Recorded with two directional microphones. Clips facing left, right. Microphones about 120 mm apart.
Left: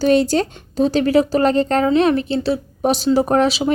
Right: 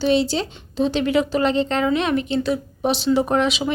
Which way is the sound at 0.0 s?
45° left (ahead or behind).